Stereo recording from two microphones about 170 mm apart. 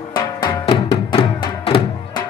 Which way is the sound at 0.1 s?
30° left (ahead or behind).